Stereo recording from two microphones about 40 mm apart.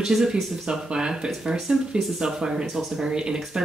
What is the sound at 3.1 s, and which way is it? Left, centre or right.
Speech, right.